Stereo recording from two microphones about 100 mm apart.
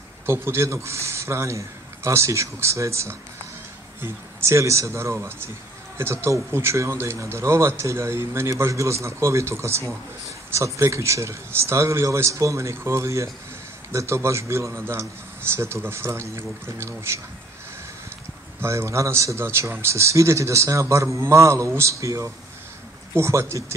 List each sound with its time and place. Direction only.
0.3 s speech: 25° right (ahead or behind)
18.6 s speech: 25° right (ahead or behind)